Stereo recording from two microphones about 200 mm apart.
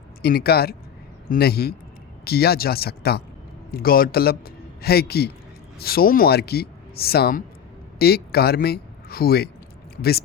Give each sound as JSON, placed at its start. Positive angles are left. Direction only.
{"t": 0.2, "sound": "a man's voice", "side_deg": 50}